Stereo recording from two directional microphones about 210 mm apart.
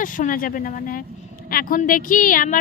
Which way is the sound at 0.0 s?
40° left (ahead or behind).